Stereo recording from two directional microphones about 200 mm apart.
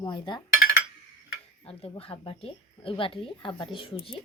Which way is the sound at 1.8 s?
30° left (ahead or behind).